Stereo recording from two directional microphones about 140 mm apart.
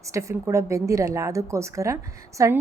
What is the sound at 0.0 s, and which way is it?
A woman's voice, 20° right (ahead or behind).